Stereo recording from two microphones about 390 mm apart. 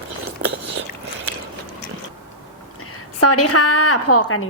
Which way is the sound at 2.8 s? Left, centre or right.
Left.